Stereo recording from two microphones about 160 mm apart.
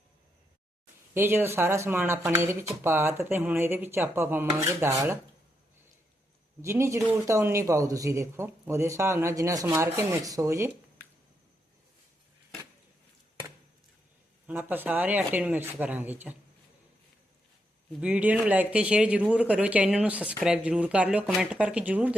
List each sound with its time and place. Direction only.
1.1 s speech: 15° right (ahead or behind)
6.6 s speech: 15° right (ahead or behind)
14.4 s speech: 10° right (ahead or behind)
18.0 s speech: 10° right (ahead or behind)